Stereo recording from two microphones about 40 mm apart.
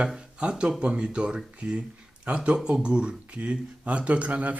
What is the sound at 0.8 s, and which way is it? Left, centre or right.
Speech, right.